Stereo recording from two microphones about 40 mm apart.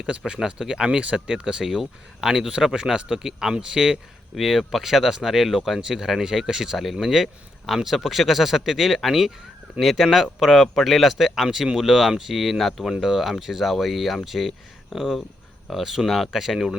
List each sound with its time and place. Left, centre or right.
0.3 s speech: centre
4.4 s speech: centre